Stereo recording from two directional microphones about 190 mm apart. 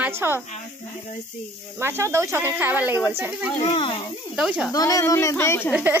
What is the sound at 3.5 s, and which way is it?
Speech, 30° left (ahead or behind).